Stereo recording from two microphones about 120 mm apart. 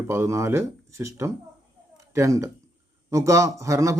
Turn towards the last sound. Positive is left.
turn(degrees=-25)  # may be behind; listen again after turning